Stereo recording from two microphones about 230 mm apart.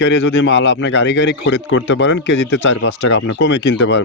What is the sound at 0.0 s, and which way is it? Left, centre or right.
Speech, left.